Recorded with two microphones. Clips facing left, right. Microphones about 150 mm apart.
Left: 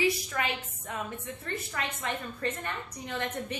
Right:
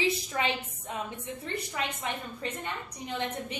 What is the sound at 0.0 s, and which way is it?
A woman's voice, 20° right (ahead or behind).